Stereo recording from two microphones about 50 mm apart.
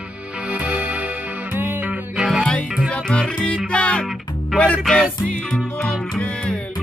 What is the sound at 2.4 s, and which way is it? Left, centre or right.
Music, left.